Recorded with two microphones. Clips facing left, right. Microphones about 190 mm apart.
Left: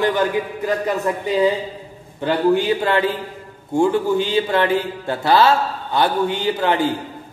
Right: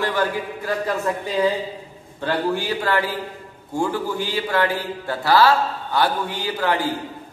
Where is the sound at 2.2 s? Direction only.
20° left (ahead or behind).